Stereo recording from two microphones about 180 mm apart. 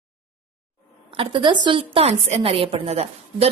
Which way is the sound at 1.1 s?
30° right (ahead or behind).